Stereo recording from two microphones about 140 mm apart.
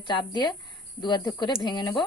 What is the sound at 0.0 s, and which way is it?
Speech, 35° left (ahead or behind).